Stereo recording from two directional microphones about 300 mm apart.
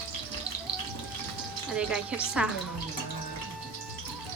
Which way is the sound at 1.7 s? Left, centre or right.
Centre.